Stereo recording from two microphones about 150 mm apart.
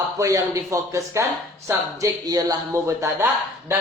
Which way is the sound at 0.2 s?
20° right (ahead or behind).